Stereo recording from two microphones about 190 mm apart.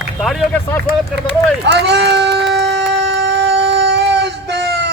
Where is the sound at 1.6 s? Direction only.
65° right (ahead or behind).